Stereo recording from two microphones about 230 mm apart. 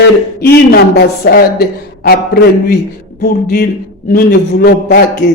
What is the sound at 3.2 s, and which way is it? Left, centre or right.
A woman's voice, left.